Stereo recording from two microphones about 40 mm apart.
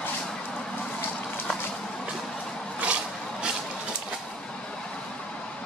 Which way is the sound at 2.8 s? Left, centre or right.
Right.